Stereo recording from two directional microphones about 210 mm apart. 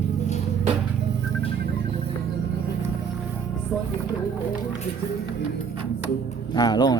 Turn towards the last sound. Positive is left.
turn(degrees=20)  # may be behind; listen again after turning